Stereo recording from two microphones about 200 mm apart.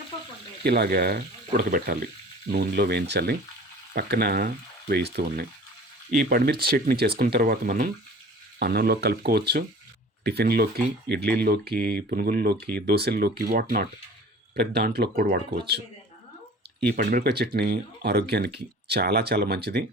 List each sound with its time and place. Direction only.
0.6 s speech: 50° right (ahead or behind)
16.8 s speech: 55° right (ahead or behind)